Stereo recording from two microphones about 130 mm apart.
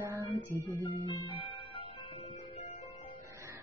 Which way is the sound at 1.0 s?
40° left (ahead or behind).